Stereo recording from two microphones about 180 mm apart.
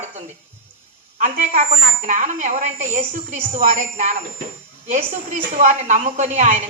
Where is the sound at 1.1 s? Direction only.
50° right (ahead or behind).